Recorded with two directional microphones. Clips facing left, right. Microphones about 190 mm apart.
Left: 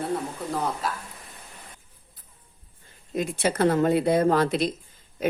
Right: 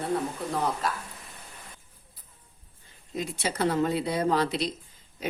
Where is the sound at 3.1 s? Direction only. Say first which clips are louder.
Left 6 dB; 55° left (ahead or behind).